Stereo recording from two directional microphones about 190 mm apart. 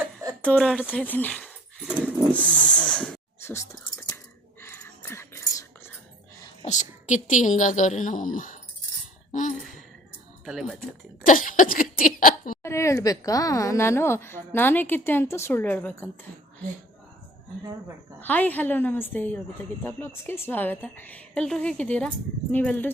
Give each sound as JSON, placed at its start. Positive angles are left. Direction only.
{"t": 0.0, "sound": "a sound", "side_deg": -20}
{"t": 0.4, "sound": "speech", "side_deg": 0}
{"t": 3.4, "sound": "whispering", "side_deg": 15}
{"t": 6.7, "sound": "a woman's voice", "side_deg": 40}
{"t": 9.3, "sound": "a sound", "side_deg": 40}
{"t": 10.4, "sound": "speech", "side_deg": 0}
{"t": 11.3, "sound": "a sound", "side_deg": 45}
{"t": 12.6, "sound": "speech", "side_deg": 15}
{"t": 18.2, "sound": "speech", "side_deg": 10}